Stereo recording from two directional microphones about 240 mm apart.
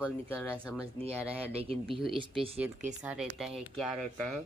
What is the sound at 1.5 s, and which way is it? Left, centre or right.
Speech, right.